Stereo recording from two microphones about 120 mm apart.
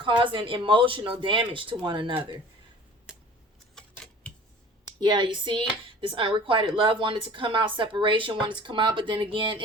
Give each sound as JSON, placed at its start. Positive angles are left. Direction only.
{"t": 0.0, "sound": "speech", "side_deg": -40}
{"t": 3.8, "sound": "a sound", "side_deg": 5}
{"t": 4.9, "sound": "speech", "side_deg": -40}